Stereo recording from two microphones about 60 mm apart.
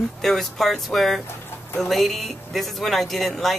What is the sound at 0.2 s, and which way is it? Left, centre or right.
Speech, centre.